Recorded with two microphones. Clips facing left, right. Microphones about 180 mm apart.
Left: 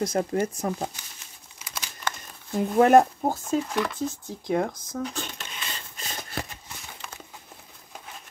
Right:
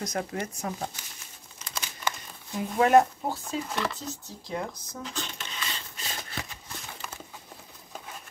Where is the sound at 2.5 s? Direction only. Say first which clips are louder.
Left 4 dB; 45° left (ahead or behind).